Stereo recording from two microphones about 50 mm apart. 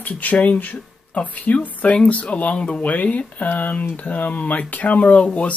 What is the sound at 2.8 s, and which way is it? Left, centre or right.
Speech, left.